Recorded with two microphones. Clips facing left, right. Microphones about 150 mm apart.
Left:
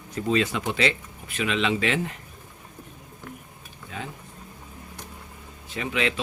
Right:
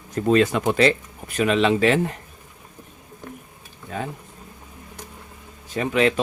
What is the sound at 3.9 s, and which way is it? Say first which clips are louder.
Speech: right 7 dB; 45° right (ahead or behind).